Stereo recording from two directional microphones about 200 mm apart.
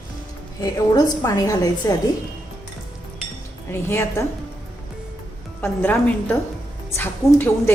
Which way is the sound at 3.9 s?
10° left (ahead or behind).